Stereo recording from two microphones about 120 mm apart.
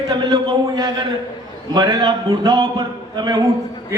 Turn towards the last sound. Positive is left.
turn(degrees=-35)  # may be behind; listen again after turning